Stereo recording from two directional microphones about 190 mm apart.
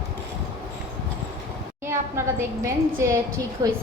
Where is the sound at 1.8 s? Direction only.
15° right (ahead or behind).